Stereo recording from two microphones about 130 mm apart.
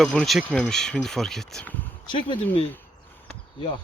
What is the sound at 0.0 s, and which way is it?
Speech, 5° left (ahead or behind).